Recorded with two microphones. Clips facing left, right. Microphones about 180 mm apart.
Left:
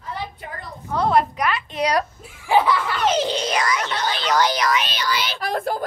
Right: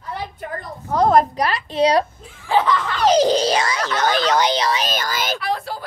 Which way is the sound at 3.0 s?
40° right (ahead or behind).